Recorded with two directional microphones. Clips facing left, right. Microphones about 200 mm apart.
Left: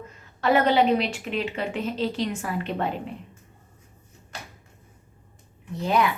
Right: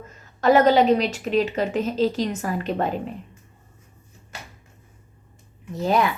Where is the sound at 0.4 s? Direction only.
40° right (ahead or behind).